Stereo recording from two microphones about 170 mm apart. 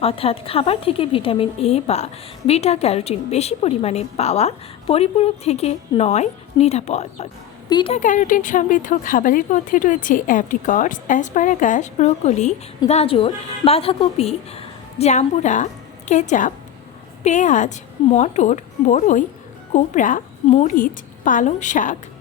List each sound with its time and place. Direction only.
0.0 s a woman's voice: 35° left (ahead or behind)
7.7 s speech: 25° left (ahead or behind)
7.9 s a woman's voice: 50° left (ahead or behind)